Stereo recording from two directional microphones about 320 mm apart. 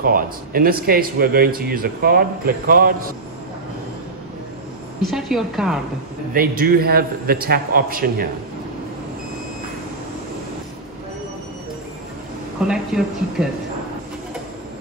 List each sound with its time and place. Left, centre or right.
0.0 s a man's voice: right
5.0 s speech: centre
6.3 s a man's voice: right
12.6 s speech: centre